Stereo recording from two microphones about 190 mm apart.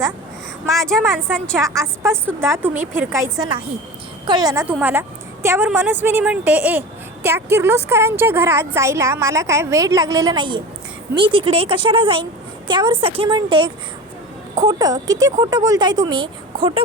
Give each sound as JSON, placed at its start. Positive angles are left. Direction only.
{"t": 0.7, "sound": "a woman's voice", "side_deg": 0}
{"t": 1.5, "sound": "a woman's voice", "side_deg": -15}